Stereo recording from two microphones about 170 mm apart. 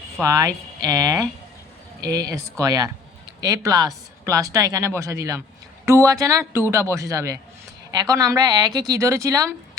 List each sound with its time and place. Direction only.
0.2 s a man's voice: 20° right (ahead or behind)